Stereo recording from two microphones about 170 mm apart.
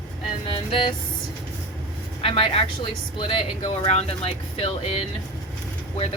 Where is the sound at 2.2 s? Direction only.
35° left (ahead or behind).